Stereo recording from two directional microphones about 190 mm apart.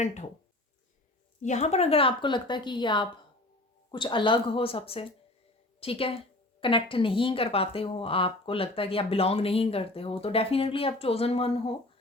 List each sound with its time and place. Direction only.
0.0 s speech: 40° left (ahead or behind)
1.4 s speech: 40° left (ahead or behind)